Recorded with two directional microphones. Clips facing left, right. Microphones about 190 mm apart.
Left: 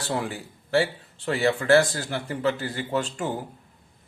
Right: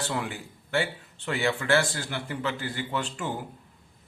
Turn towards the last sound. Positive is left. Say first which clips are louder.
# left 4 dB
turn(degrees=40)  # may be behind; listen again after turning